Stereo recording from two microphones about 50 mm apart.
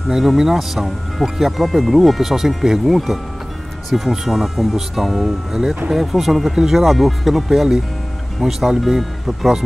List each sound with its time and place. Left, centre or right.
0.1 s speech: centre